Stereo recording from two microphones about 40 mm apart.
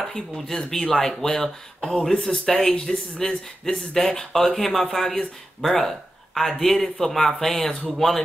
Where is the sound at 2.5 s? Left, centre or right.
Left.